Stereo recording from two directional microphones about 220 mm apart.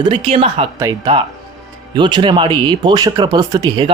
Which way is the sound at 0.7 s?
15° right (ahead or behind).